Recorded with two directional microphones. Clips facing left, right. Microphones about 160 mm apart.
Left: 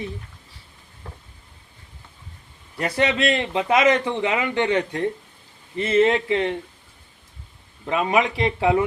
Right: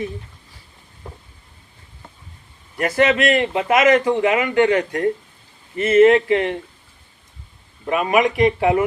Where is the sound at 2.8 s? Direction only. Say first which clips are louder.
Right 4 dB; 25° left (ahead or behind).